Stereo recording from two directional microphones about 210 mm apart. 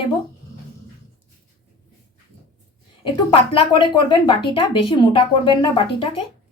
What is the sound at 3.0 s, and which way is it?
A woman's voice, 25° left (ahead or behind).